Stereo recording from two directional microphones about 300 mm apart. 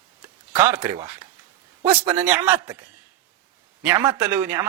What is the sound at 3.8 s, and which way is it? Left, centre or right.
Speech, centre.